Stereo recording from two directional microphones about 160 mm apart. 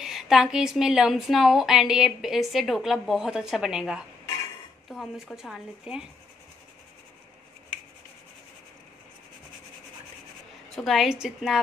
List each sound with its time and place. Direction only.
0.0 s a woman's voice: centre (ahead or behind)
10.8 s a woman's voice: centre (ahead or behind)